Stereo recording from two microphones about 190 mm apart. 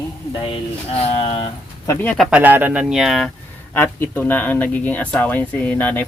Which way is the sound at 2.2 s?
10° right (ahead or behind).